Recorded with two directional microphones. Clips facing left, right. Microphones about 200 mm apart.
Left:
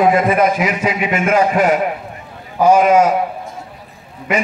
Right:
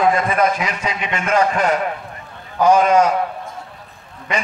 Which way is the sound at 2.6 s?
5° left (ahead or behind).